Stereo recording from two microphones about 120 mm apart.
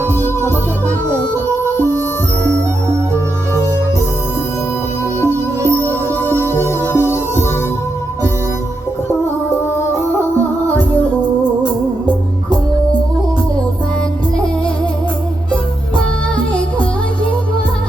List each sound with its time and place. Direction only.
5.2 s music: 20° left (ahead or behind)